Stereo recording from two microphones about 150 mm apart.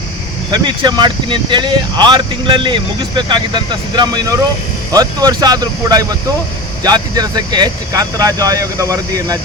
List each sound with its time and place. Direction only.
0.5 s speech: 30° right (ahead or behind)